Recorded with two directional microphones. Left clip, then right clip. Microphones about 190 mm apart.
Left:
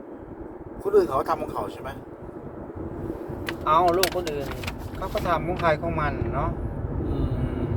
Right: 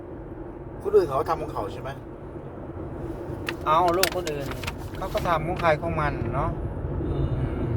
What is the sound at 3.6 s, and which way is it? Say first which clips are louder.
Speech: left 1 dB; 15° right (ahead or behind).